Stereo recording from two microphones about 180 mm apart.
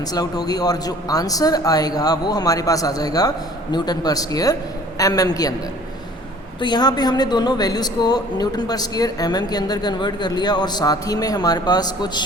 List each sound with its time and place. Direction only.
0.0 s a woman's voice: 20° left (ahead or behind)
6.6 s a woman's voice: 25° left (ahead or behind)